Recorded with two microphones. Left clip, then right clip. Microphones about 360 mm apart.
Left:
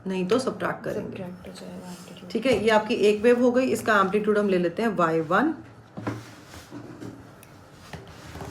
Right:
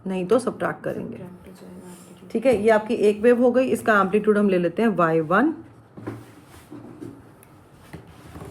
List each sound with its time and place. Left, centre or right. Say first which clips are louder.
0.1 s a woman's voice: right 3 dB; centre
2.4 s a woman's voice: right 3 dB; centre